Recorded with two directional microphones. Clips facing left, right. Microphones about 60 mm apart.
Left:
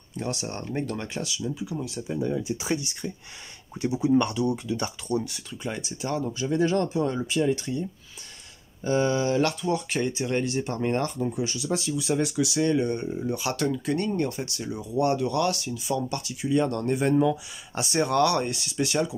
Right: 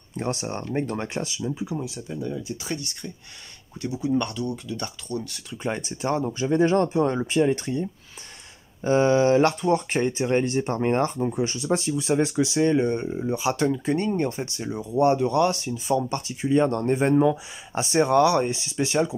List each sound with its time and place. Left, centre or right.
0.1 s speech: right
2.0 s speech: centre
5.6 s speech: right
8.8 s speech: right